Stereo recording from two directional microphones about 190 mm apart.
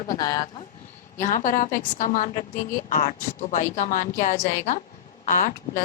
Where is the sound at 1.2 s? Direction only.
45° left (ahead or behind).